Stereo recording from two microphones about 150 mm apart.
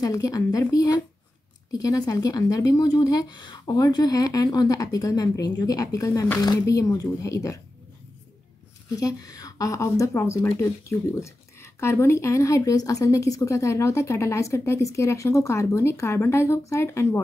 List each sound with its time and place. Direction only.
0.0 s speech: 25° left (ahead or behind)
8.9 s speech: 25° left (ahead or behind)